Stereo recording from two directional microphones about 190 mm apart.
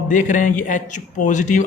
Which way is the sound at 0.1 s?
40° left (ahead or behind).